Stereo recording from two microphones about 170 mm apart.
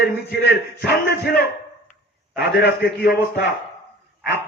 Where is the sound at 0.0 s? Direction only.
80° left.